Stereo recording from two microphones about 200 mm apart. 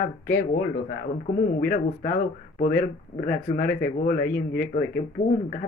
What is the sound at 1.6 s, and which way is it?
Speech, 45° left (ahead or behind).